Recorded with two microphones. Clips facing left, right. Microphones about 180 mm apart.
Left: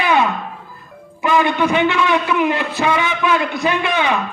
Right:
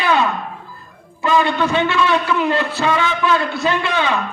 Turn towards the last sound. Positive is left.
turn(degrees=15)  # may be behind; listen again after turning